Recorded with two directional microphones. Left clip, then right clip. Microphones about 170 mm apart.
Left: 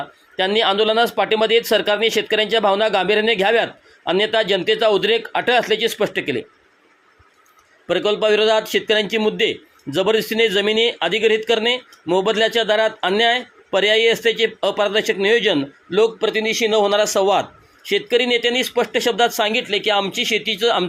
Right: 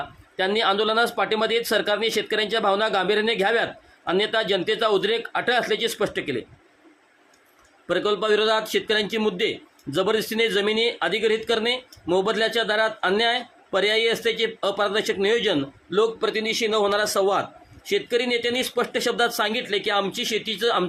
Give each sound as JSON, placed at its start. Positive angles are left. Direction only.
{"t": 0.3, "sound": "a man's voice", "side_deg": 15}
{"t": 7.9, "sound": "a man's voice", "side_deg": 15}